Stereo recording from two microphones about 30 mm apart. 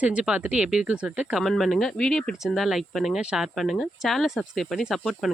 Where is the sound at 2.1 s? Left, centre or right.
Centre.